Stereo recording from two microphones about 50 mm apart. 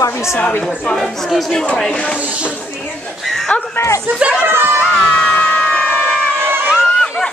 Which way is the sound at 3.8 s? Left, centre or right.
Left.